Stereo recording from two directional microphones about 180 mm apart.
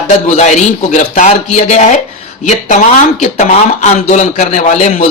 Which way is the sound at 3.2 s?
40° left (ahead or behind).